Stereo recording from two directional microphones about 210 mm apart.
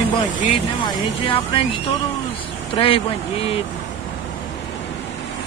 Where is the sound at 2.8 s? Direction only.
25° left (ahead or behind).